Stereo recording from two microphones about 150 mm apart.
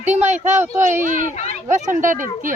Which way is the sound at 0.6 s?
15° right (ahead or behind).